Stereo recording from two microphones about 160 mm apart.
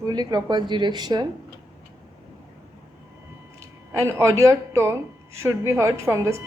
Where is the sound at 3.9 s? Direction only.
20° right (ahead or behind).